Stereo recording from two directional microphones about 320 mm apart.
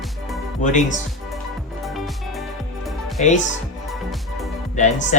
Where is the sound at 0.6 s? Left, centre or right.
Left.